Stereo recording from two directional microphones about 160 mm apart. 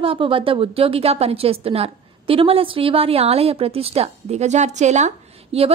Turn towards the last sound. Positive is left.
turn(degrees=-40)  # may be behind; listen again after turning